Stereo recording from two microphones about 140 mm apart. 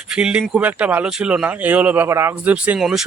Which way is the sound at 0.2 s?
5° right (ahead or behind).